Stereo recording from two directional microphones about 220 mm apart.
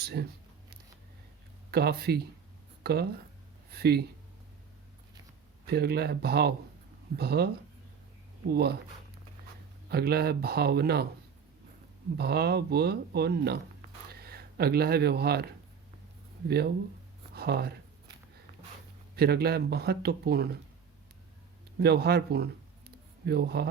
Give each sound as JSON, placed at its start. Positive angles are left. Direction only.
{"t": 0.0, "sound": "speech", "side_deg": -45}
{"t": 1.7, "sound": "speech", "side_deg": -45}
{"t": 3.7, "sound": "a sound", "side_deg": -45}
{"t": 5.6, "sound": "speech", "side_deg": -45}
{"t": 9.9, "sound": "speech", "side_deg": -45}
{"t": 12.1, "sound": "speech", "side_deg": -45}
{"t": 16.5, "sound": "speech", "side_deg": -45}
{"t": 19.1, "sound": "speech", "side_deg": -45}
{"t": 21.8, "sound": "speech", "side_deg": -45}